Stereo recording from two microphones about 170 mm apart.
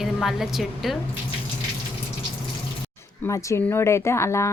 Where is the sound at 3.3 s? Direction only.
20° left (ahead or behind).